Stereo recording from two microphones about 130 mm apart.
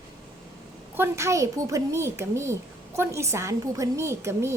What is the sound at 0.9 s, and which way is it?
A woman's voice, 20° right (ahead or behind).